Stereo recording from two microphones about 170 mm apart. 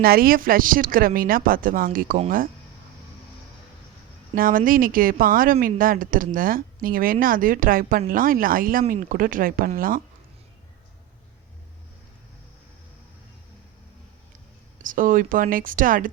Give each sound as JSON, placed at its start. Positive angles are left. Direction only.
{"t": 0.0, "sound": "speech", "side_deg": -60}
{"t": 4.4, "sound": "speech", "side_deg": -55}
{"t": 14.8, "sound": "speech", "side_deg": -50}